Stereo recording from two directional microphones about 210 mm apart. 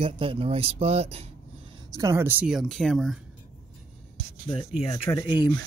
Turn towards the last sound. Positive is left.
turn(degrees=20)  # may be behind; listen again after turning